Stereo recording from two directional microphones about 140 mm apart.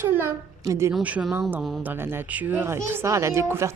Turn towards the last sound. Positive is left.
turn(degrees=-20)  # may be behind; listen again after turning